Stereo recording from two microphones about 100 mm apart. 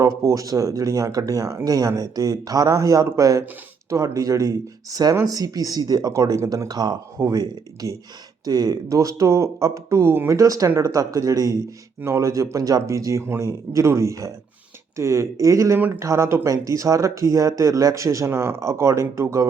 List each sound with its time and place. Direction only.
0.2 s speech: 35° right (ahead or behind)
11.9 s speech: 25° right (ahead or behind)